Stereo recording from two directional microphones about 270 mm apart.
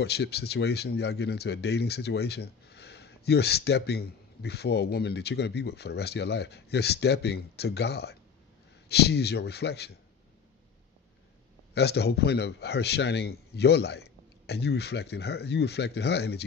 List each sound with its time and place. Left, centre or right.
0.0 s speech: left
11.7 s speech: left